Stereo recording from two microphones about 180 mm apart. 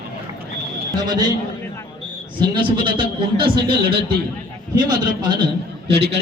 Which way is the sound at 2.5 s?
25° right (ahead or behind).